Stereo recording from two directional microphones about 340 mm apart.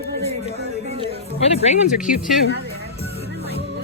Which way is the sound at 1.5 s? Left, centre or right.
Left.